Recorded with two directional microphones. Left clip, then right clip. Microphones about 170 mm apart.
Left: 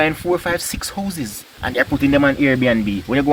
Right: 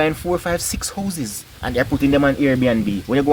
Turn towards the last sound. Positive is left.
turn(degrees=-55)  # may be behind; listen again after turning